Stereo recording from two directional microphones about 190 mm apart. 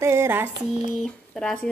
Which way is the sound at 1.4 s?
5° left (ahead or behind).